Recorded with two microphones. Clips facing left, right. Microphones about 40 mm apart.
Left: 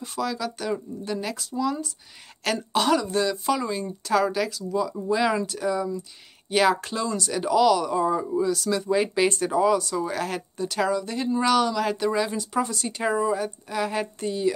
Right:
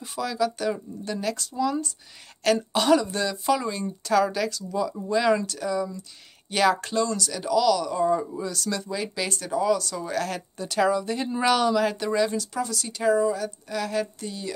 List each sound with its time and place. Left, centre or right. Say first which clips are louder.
0.0 s speech: right 2 dB; centre
7.2 s speech: left 2 dB; left
8.0 s speech: left 1 dB; centre
8.9 s speech: left 7 dB; left; by 12.4 s centre
12.4 s speech: left 2 dB; left